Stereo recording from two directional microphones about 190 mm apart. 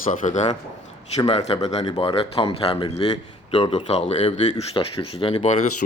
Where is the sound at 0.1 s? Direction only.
40° left (ahead or behind).